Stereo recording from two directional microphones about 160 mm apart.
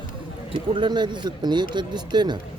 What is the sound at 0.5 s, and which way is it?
Speech, 30° right (ahead or behind).